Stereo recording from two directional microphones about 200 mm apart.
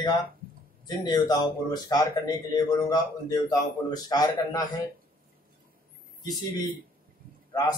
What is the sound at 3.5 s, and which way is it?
Speech, 20° left (ahead or behind).